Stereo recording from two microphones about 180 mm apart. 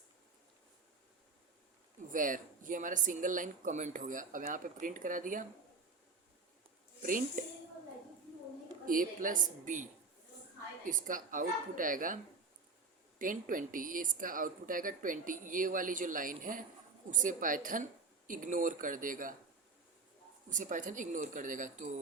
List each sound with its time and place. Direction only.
2.1 s speech: 50° right (ahead or behind)
7.0 s speech: 50° right (ahead or behind)
8.9 s speech: 50° right (ahead or behind)
20.5 s speech: 45° right (ahead or behind)